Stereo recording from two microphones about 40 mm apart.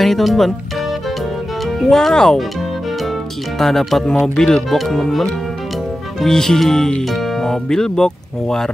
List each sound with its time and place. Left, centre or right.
0.0 s speech: centre
1.9 s speech: centre
3.5 s speech: centre
4.0 s speech: centre
4.6 s speech: centre
6.2 s speech: centre